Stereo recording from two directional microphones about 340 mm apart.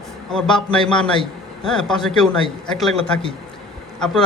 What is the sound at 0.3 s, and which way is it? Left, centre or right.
A man's voice, centre.